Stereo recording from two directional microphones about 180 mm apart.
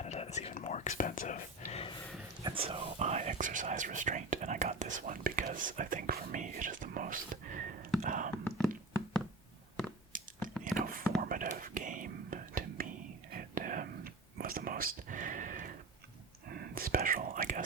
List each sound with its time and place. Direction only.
0.0 s whispering: 35° left (ahead or behind)
2.4 s speech: 30° right (ahead or behind); by 7.9 s 50° right (ahead or behind)
8.0 s whispering: 45° right (ahead or behind)
8.4 s a sound: 5° left (ahead or behind)
10.1 s a sound: 50° right (ahead or behind)
10.6 s whispering: 50° right (ahead or behind)